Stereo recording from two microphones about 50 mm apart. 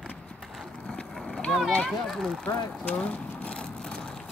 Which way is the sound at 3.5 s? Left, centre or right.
Centre.